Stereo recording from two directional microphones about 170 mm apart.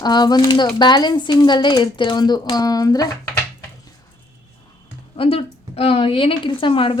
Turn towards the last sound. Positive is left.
turn(degrees=30)  # may be behind; listen again after turning